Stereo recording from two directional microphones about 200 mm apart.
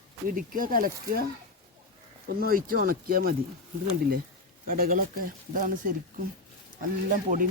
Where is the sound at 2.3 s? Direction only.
45° right (ahead or behind).